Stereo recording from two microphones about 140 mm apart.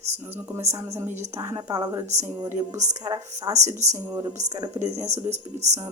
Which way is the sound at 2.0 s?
50° right (ahead or behind).